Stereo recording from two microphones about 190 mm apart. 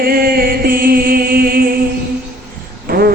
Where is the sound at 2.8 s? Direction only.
55° right (ahead or behind).